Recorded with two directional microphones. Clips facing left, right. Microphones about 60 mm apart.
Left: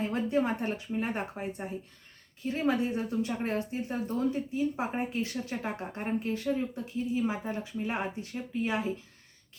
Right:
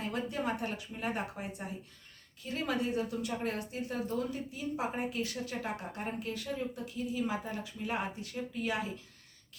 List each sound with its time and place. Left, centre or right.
0.0 s speech: left